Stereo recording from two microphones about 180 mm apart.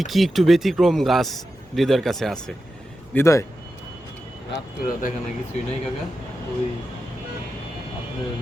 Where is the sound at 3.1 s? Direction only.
15° left (ahead or behind).